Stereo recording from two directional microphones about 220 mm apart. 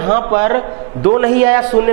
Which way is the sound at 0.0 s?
20° right (ahead or behind).